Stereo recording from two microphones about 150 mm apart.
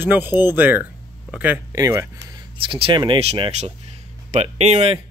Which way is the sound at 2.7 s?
35° right (ahead or behind).